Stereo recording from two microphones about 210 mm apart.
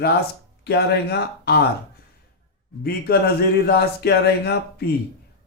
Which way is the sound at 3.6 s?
50° left (ahead or behind).